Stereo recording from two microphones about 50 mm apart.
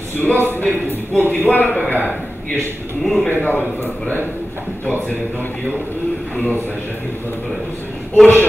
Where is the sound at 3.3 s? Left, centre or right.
Left.